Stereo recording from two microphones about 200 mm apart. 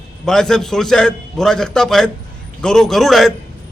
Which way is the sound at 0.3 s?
Centre (ahead or behind).